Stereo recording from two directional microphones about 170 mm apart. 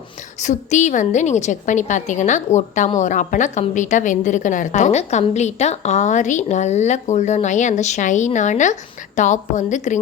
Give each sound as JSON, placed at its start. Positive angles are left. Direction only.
{"t": 0.4, "sound": "a woman's voice", "side_deg": 45}